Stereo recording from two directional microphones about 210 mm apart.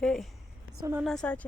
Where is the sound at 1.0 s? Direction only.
5° left (ahead or behind).